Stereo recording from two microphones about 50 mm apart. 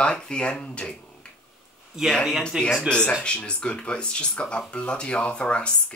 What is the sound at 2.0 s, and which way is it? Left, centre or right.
Speech, centre.